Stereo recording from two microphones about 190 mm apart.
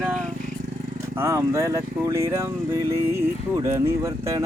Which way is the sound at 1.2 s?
15° right (ahead or behind).